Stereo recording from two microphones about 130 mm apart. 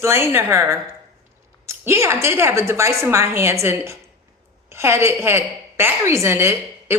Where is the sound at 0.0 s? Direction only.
20° right (ahead or behind).